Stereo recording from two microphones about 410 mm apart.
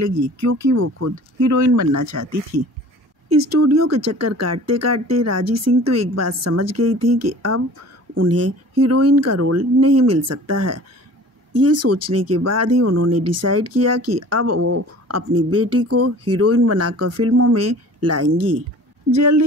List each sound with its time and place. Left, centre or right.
0.0 s speech: right